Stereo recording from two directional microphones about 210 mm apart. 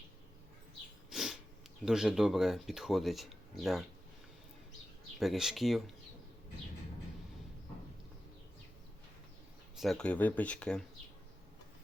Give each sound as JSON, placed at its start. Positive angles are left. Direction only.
{"t": 1.1, "sound": "sniff", "side_deg": 0}
{"t": 1.8, "sound": "speech", "side_deg": 0}
{"t": 5.2, "sound": "speech", "side_deg": 0}
{"t": 9.7, "sound": "speech", "side_deg": 0}